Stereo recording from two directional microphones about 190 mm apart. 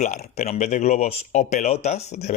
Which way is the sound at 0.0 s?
40° left (ahead or behind).